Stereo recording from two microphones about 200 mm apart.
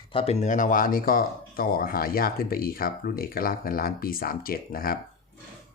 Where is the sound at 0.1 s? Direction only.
30° left (ahead or behind); by 4.9 s 45° left (ahead or behind).